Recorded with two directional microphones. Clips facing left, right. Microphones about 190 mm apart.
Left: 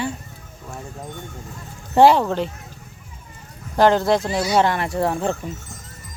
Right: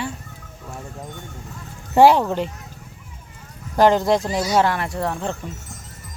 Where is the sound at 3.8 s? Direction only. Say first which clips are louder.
Even; 10° right (ahead or behind).